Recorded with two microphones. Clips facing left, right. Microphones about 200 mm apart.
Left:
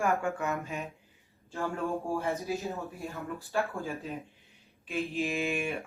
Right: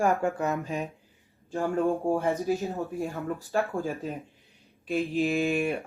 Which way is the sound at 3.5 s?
45° right (ahead or behind).